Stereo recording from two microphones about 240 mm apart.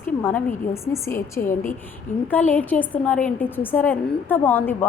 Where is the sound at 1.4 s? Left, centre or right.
Left.